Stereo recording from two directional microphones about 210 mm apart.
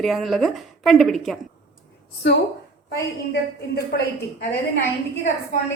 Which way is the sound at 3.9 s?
50° left (ahead or behind).